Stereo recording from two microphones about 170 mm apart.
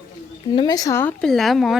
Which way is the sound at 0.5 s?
25° left (ahead or behind).